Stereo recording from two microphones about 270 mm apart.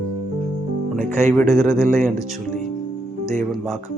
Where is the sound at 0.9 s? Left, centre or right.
Right.